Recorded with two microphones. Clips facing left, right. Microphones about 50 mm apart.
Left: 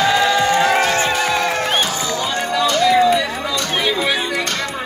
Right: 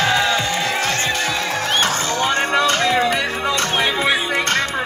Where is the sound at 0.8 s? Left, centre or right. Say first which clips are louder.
Left 4 dB; left.